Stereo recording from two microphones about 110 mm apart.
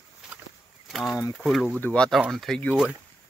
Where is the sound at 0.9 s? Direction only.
Centre (ahead or behind).